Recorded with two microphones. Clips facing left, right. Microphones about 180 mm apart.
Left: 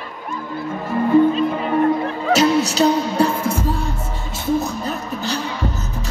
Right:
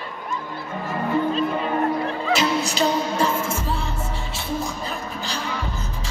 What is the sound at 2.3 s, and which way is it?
Music, 40° left (ahead or behind).